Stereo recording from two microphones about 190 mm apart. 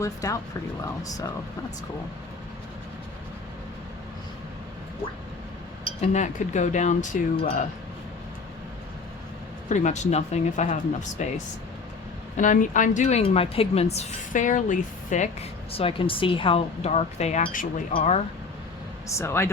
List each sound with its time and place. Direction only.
0.0 s speech: 15° left (ahead or behind)
6.0 s speech: 40° left (ahead or behind)
9.6 s speech: 40° left (ahead or behind)
12.4 s speech: 40° left (ahead or behind)
19.1 s speech: 15° left (ahead or behind)